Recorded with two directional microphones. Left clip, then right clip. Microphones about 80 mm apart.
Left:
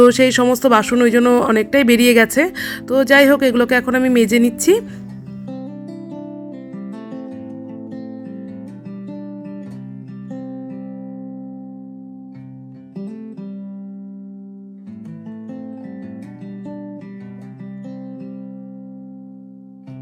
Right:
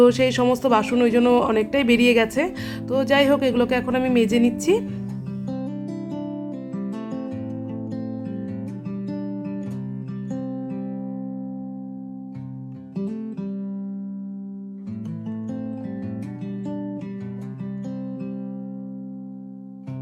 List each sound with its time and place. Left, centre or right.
0.0 s speech: left
1.2 s speech: left
5.5 s music: centre
6.7 s guitar: centre
9.0 s music: centre
10.2 s music: centre
13.0 s music: centre